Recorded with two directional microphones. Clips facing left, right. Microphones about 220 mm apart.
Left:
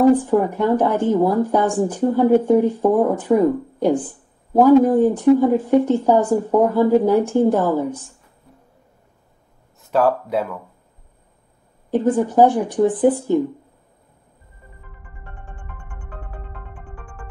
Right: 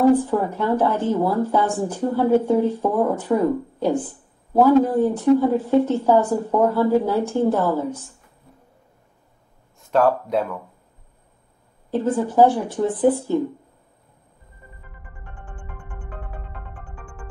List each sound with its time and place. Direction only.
0.2 s speech: 15° left (ahead or behind)
9.8 s speech: centre (ahead or behind)
11.9 s speech: 15° left (ahead or behind)